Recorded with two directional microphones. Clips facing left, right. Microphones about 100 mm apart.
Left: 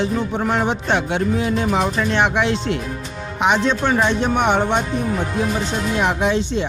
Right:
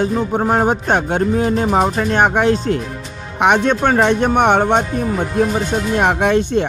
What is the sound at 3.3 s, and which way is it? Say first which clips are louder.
Speech: right 4 dB; 55° right (ahead or behind).